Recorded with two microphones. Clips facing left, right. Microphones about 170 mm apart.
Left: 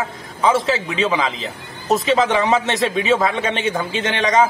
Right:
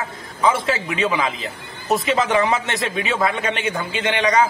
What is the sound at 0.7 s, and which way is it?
Speech, 20° left (ahead or behind).